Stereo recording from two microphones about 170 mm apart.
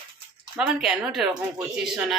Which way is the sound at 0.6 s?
5° right (ahead or behind).